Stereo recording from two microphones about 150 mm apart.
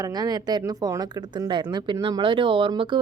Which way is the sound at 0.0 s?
25° right (ahead or behind).